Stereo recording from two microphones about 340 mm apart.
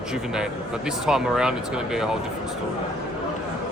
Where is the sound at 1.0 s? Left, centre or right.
Centre.